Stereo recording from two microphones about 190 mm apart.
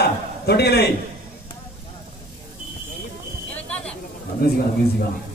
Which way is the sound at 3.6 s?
5° left (ahead or behind).